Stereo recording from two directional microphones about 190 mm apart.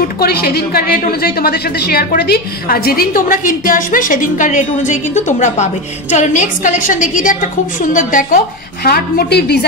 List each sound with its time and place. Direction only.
0.2 s a woman's voice: 55° left (ahead or behind)
8.8 s a woman's voice: 55° left (ahead or behind)